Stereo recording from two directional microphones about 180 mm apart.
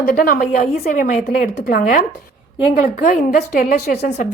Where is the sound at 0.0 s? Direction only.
50° left (ahead or behind).